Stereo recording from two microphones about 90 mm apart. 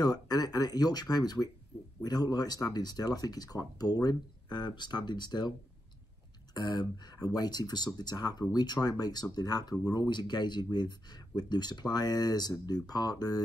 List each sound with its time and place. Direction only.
0.0 s speech: 50° left (ahead or behind)
6.5 s speech: 50° left (ahead or behind)